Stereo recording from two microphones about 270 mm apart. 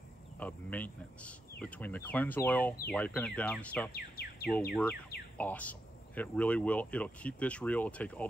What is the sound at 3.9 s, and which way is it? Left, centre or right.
Speech, left.